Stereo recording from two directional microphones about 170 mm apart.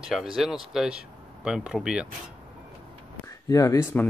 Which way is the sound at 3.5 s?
20° left (ahead or behind).